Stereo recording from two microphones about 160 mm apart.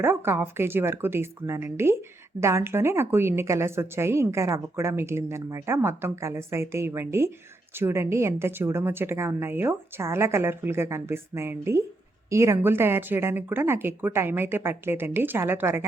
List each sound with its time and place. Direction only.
0.0 s a woman's voice: 15° right (ahead or behind)